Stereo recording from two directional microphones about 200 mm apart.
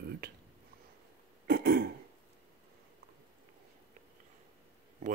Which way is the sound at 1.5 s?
50° right (ahead or behind).